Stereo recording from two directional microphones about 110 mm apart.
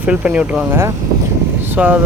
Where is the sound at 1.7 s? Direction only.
15° right (ahead or behind).